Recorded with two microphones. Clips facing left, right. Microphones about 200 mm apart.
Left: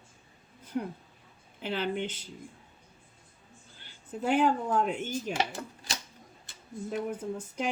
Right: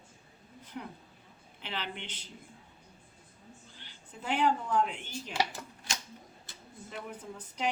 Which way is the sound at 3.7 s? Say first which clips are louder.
Left 15 dB; 45° left (ahead or behind).